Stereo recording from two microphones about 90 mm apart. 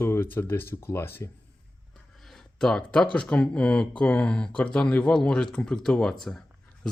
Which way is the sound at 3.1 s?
10° left (ahead or behind).